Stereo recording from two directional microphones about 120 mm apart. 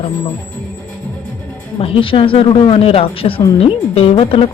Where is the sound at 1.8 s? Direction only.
50° left (ahead or behind).